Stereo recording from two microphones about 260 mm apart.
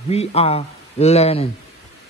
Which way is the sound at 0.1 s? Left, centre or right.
Left.